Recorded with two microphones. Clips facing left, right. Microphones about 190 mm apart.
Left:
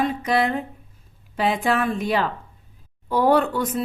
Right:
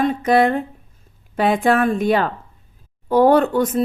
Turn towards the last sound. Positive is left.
turn(degrees=-45)  # may be behind; listen again after turning